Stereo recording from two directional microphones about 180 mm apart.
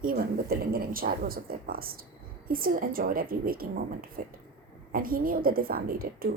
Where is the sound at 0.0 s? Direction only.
55° right (ahead or behind).